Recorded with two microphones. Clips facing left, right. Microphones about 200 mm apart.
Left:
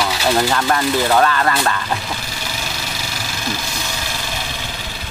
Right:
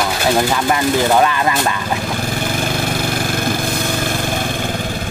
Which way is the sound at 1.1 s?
15° right (ahead or behind).